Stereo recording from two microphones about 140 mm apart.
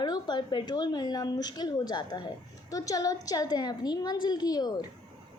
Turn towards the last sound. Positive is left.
turn(degrees=30)  # may be behind; listen again after turning